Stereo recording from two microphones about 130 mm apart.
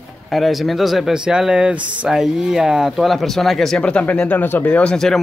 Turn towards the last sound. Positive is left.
turn(degrees=5)  # may be behind; listen again after turning